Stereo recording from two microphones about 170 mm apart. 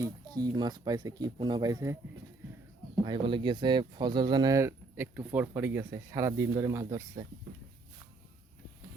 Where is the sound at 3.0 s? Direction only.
30° right (ahead or behind).